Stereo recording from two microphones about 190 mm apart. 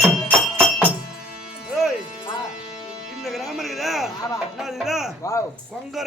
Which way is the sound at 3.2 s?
Centre (ahead or behind).